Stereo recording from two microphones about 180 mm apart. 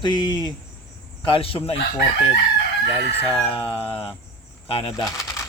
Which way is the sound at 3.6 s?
30° left (ahead or behind).